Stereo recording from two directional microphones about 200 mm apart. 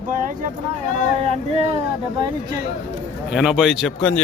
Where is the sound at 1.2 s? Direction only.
30° right (ahead or behind).